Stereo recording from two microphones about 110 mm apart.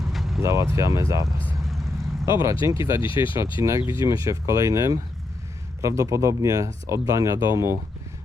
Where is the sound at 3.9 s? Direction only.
30° right (ahead or behind).